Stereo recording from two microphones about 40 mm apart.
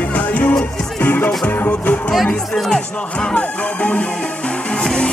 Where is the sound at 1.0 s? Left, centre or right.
Left.